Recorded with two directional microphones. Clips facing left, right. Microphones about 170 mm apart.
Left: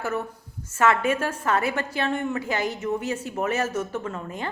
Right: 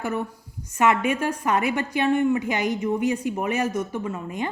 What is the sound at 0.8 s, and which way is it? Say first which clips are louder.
Speech: right 1 dB; 15° right (ahead or behind).